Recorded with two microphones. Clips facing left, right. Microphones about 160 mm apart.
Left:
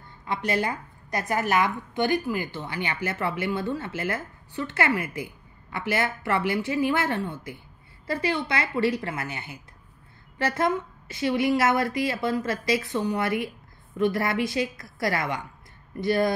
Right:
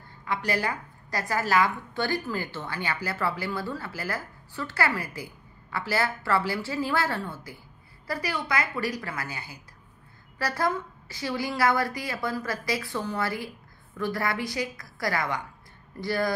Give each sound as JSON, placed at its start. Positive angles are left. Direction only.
{"t": 0.2, "sound": "a woman's voice", "side_deg": 20}